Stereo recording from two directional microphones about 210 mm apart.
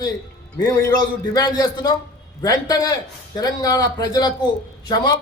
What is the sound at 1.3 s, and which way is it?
A man's voice, 20° left (ahead or behind).